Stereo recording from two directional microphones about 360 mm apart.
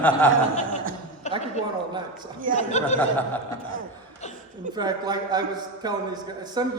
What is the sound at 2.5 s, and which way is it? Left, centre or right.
Speech, centre.